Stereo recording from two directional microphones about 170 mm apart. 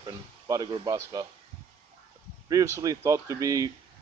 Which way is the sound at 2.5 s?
20° right (ahead or behind).